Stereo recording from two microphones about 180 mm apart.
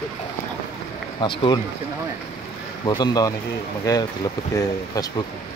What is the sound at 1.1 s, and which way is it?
Speech, 25° left (ahead or behind).